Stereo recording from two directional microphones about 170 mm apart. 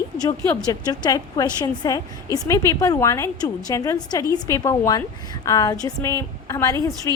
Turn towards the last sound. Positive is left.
turn(degrees=20)  # may be behind; listen again after turning